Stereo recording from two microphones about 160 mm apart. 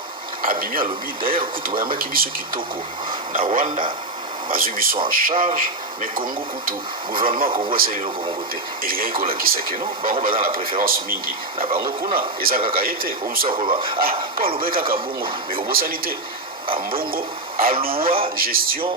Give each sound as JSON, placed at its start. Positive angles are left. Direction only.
{"t": 0.4, "sound": "speech", "side_deg": -60}
{"t": 7.4, "sound": "speech", "side_deg": -35}
{"t": 7.7, "sound": "speech", "side_deg": -65}
{"t": 11.7, "sound": "speech", "side_deg": -30}
{"t": 12.1, "sound": "speech", "side_deg": -65}
{"t": 13.5, "sound": "speech", "side_deg": -35}
{"t": 14.0, "sound": "speech", "side_deg": -65}
{"t": 18.3, "sound": "music", "side_deg": -65}